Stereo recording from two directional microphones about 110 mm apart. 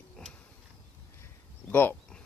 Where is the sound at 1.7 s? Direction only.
15° left (ahead or behind).